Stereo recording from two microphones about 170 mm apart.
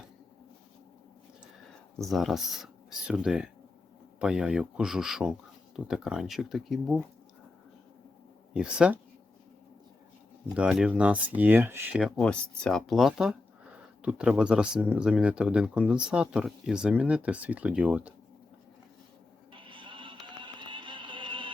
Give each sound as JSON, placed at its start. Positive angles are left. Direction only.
{"t": 2.0, "sound": "speech", "side_deg": 0}
{"t": 8.5, "sound": "speech", "side_deg": -5}
{"t": 10.5, "sound": "speech", "side_deg": -5}
{"t": 19.5, "sound": "music", "side_deg": -30}